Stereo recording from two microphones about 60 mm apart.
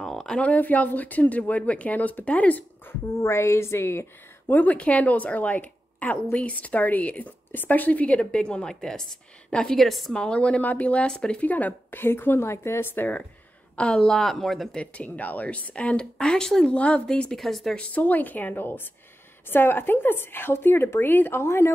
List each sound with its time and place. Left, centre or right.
0.0 s a sound: centre
0.4 s a woman's voice: left
3.1 s a woman's voice: left
4.5 s a woman's voice: left; by 9.8 s centre
9.8 s speech: centre
10.1 s a woman's voice: centre; by 13.1 s left
13.7 s speech: centre
14.8 s a woman's voice: left
17.4 s speech: centre
17.7 s a woman's voice: left